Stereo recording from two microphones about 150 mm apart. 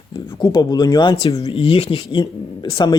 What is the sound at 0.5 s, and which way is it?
Speech, 25° left (ahead or behind).